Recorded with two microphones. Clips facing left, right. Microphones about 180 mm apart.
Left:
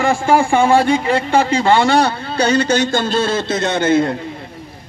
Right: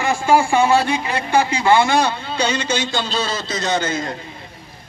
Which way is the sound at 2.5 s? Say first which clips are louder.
Left 7 dB; 40° left (ahead or behind).